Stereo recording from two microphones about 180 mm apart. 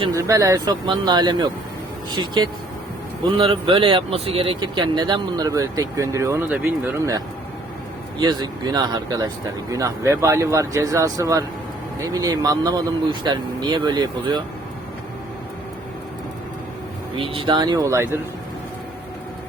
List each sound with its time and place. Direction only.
0.0 s speech: 20° right (ahead or behind)
8.2 s speech: 25° right (ahead or behind)
17.2 s speech: 30° right (ahead or behind)